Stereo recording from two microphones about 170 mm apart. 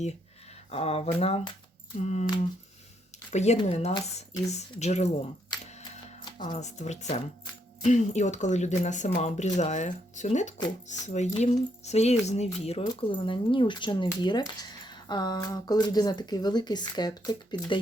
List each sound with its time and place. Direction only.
0.7 s speech: 35° left (ahead or behind)
3.3 s speech: 40° left (ahead or behind)
6.5 s speech: 45° left (ahead or behind); by 17.7 s 25° left (ahead or behind)